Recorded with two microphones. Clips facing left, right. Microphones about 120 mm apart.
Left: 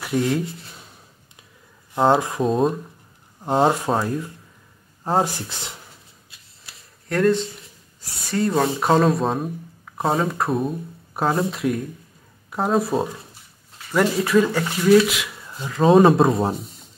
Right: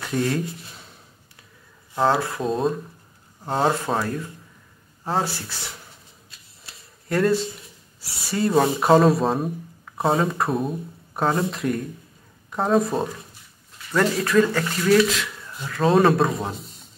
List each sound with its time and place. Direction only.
0.0 s speech: 10° left (ahead or behind)
2.0 s speech: 20° left (ahead or behind)
2.4 s speech: 5° left (ahead or behind)
3.4 s speech: 15° left (ahead or behind)
7.1 s speech: 5° right (ahead or behind)